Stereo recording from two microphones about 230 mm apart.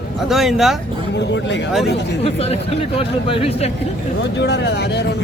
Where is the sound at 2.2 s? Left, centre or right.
Left.